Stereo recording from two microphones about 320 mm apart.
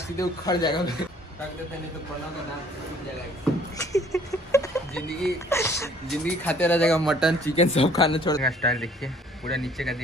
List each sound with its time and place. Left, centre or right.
0.2 s speech: centre
3.7 s speech: centre
7.5 s speech: centre
8.5 s speech: centre